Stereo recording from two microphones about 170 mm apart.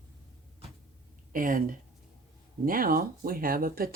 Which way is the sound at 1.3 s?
55° right (ahead or behind).